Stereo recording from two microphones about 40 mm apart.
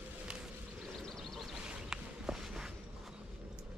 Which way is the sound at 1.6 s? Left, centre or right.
Right.